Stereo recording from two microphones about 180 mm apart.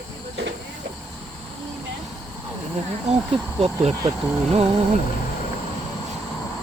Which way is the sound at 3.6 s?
35° right (ahead or behind).